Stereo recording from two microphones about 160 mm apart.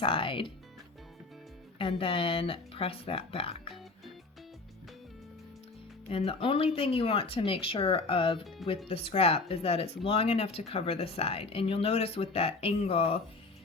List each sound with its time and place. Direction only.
0.0 s speech: 35° left (ahead or behind)
1.8 s speech: 35° left (ahead or behind)
6.1 s speech: 35° left (ahead or behind)